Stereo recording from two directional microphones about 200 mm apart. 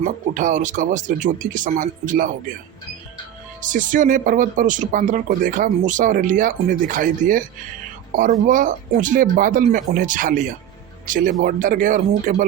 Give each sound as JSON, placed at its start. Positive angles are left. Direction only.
{"t": 0.0, "sound": "speech", "side_deg": -40}
{"t": 3.6, "sound": "speech", "side_deg": -40}